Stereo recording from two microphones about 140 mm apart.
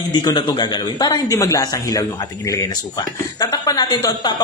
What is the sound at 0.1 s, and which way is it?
Speech, 35° left (ahead or behind).